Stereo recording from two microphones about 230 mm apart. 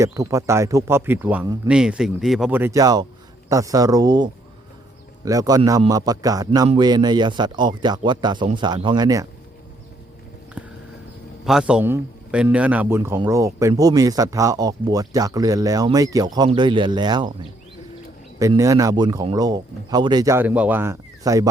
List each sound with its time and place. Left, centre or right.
0.0 s a man's voice: centre
10.6 s a sound: centre
11.4 s a man's voice: centre
18.3 s a man's voice: centre